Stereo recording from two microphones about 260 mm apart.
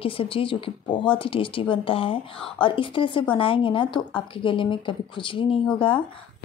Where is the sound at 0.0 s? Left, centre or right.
Left.